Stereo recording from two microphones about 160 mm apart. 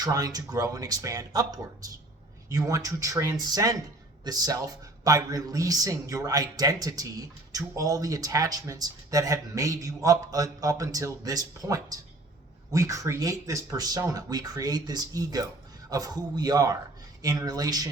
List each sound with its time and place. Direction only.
0.0 s a man's voice: 25° right (ahead or behind)